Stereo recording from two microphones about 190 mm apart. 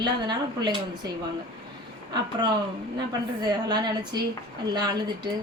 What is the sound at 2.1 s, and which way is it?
Speech, 20° right (ahead or behind).